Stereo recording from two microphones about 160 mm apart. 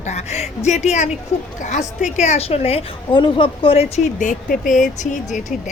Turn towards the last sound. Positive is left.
turn(degrees=50)  # may be behind; listen again after turning